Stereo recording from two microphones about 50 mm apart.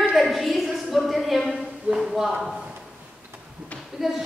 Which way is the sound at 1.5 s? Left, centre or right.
Centre.